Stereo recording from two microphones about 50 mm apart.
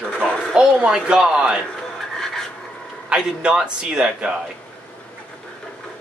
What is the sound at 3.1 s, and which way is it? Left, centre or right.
A man's voice, right.